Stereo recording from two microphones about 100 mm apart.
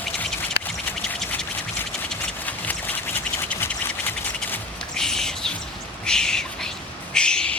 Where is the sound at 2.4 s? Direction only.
15° left (ahead or behind).